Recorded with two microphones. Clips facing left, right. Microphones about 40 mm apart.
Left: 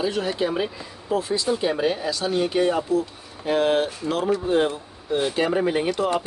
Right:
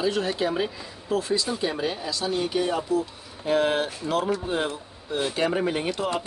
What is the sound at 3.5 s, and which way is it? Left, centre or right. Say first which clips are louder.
Speech: left 2 dB; centre.